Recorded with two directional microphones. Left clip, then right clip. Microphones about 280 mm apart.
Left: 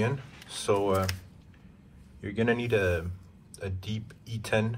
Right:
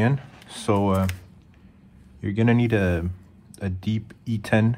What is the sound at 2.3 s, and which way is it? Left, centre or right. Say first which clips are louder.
Speech: right 4 dB; right.